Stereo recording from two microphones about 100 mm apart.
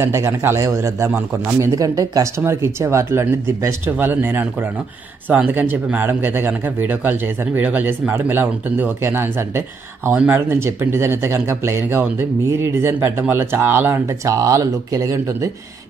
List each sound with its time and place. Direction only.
0.0 s speech: 25° right (ahead or behind)